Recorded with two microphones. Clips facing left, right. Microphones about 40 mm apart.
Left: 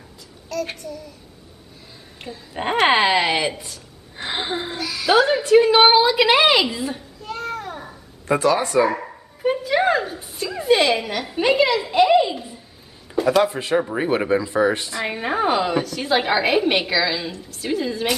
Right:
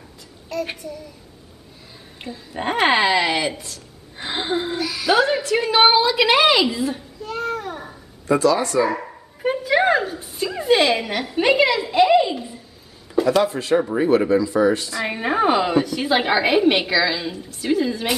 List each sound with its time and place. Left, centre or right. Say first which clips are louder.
0.5 s a woman's voice: even; centre
2.2 s a woman's voice: even; centre
5.4 s a woman's voice: left 3 dB; centre
8.3 s speech: right 1 dB; left
8.9 s dog: even; centre
9.5 s a woman's voice: right 1 dB; centre
13.1 s a sound: right 1 dB; centre
13.4 s speech: even; centre
15.0 s a woman's voice: right 2 dB; centre